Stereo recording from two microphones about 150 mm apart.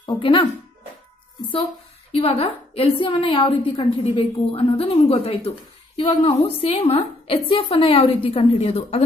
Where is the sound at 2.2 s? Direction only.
40° left (ahead or behind).